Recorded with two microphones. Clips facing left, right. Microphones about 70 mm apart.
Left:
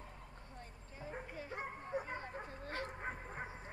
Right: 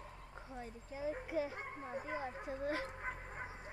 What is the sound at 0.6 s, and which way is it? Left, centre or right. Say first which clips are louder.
Speech: right 9 dB; right.